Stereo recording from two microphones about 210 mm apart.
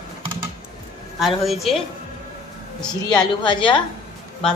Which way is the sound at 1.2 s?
Centre (ahead or behind).